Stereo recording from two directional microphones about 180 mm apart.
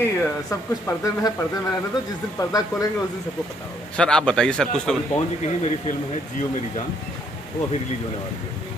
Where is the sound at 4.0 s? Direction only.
5° left (ahead or behind).